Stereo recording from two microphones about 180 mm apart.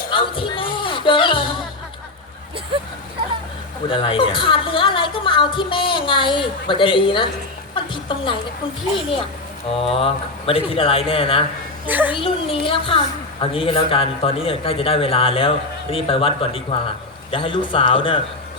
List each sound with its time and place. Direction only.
0.1 s music: 30° left (ahead or behind)
3.8 s a woman's voice: 30° left (ahead or behind)
8.0 s a sound: 25° left (ahead or behind)
9.6 s a man's voice: 30° left (ahead or behind)
11.9 s a woman's voice: 10° right (ahead or behind)
12.1 s a woman's voice: 30° left (ahead or behind)